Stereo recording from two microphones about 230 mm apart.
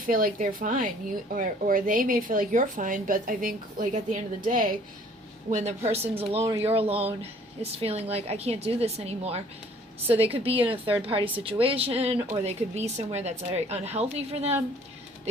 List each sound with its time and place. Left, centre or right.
0.1 s a woman's voice: right